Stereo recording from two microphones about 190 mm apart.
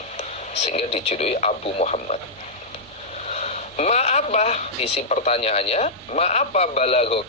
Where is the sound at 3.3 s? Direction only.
35° left (ahead or behind).